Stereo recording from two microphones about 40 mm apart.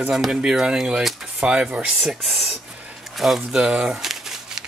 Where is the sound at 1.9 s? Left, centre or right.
Centre.